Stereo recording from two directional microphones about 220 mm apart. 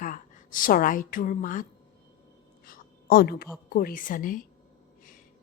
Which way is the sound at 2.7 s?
45° left (ahead or behind).